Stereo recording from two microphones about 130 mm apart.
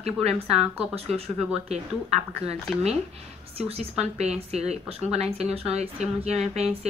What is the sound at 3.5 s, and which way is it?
A woman's voice, 50° right (ahead or behind).